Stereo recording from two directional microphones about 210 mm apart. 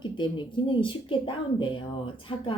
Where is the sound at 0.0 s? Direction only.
20° left (ahead or behind).